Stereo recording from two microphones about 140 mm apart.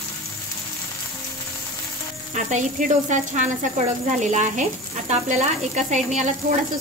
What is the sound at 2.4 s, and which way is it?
Speech, 60° right (ahead or behind).